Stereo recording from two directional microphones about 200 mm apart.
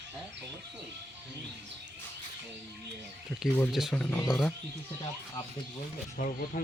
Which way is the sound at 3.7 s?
Centre (ahead or behind).